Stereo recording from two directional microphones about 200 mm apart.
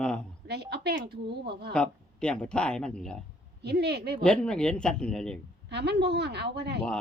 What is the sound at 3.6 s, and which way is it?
Speech, 55° right (ahead or behind).